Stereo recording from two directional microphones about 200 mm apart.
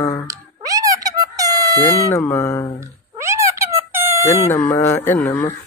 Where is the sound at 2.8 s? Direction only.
15° right (ahead or behind).